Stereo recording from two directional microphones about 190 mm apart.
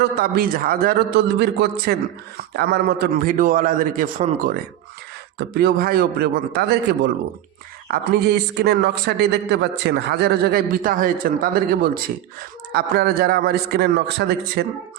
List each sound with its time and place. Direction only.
0.0 s a man's voice: 50° right (ahead or behind)
7.9 s a man's voice: 60° right (ahead or behind)